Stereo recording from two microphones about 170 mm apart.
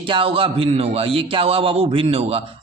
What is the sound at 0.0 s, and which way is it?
A woman's voice, 30° right (ahead or behind).